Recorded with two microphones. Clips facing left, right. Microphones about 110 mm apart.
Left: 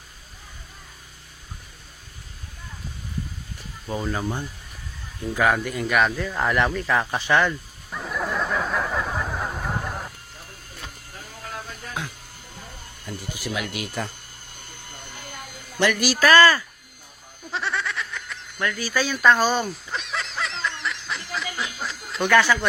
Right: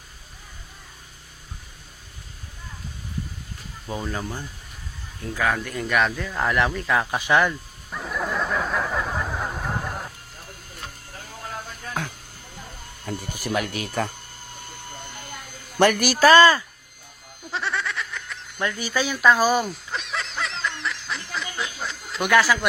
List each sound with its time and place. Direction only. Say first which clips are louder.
3.8 s speech: left 2 dB; centre (ahead or behind)
5.2 s speech: left 3 dB; 15° left (ahead or behind)
5.5 s speech: left 1 dB; 5° left (ahead or behind)
7.2 s speech: right 1 dB; 15° right (ahead or behind)
7.9 s a sound: even; centre (ahead or behind)
13.1 s speech: right 3 dB; 60° right (ahead or behind)
15.8 s speech: right 3 dB; 55° right (ahead or behind)
16.2 s speech: right 2 dB; 20° right (ahead or behind)
17.5 s goat: even; centre (ahead or behind)
18.8 s speech: even; 20° right (ahead or behind)
19.7 s snicker: even; centre (ahead or behind)
22.2 s speech: even; 5° right (ahead or behind)